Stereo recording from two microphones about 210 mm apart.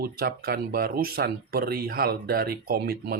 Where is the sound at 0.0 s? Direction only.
45° right (ahead or behind).